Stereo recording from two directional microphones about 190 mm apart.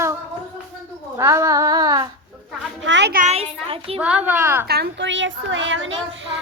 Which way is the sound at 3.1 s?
45° right (ahead or behind).